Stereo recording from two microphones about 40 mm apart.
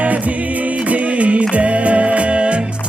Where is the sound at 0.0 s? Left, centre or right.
Right.